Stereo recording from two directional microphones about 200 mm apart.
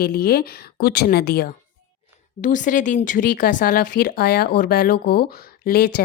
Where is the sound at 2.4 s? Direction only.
40° left (ahead or behind).